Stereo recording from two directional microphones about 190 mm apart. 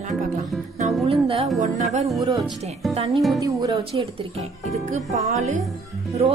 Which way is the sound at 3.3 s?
20° right (ahead or behind).